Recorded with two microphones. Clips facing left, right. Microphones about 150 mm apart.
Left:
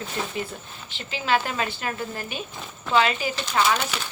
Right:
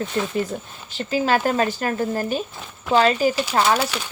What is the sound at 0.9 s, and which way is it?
Speech, 40° right (ahead or behind).